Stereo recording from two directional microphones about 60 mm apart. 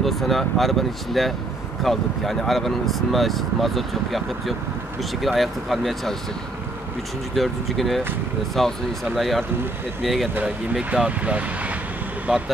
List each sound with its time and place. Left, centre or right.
0.0 s speech: centre
7.3 s speech: centre
10.4 s speech: centre
12.3 s speech: centre